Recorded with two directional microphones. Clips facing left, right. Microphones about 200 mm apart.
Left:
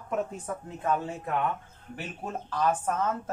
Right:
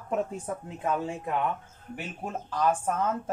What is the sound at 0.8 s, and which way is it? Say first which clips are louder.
Speech: left 1 dB; 15° right (ahead or behind).